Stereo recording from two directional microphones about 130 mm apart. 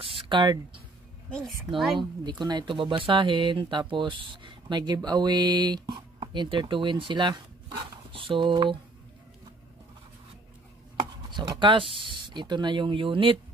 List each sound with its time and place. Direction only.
0.0 s speech: 45° right (ahead or behind)
2.0 s speech: 35° right (ahead or behind)
11.0 s speech: 35° right (ahead or behind)